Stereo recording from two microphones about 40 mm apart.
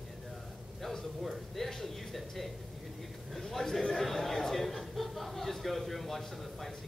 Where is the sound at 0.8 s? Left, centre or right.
Centre.